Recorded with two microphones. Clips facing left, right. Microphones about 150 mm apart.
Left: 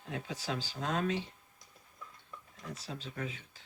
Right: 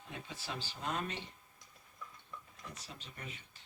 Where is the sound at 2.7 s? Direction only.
90° left.